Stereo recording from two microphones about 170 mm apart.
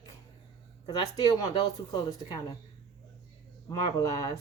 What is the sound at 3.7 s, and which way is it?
Speech, 20° left (ahead or behind).